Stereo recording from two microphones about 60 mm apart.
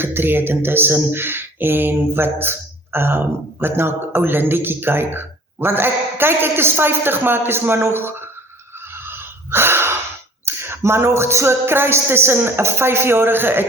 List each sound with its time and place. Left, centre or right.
0.0 s speech: right
8.9 s a sound: right
10.4 s speech: right